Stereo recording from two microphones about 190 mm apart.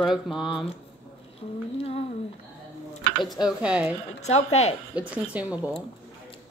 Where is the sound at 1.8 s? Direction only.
30° left (ahead or behind).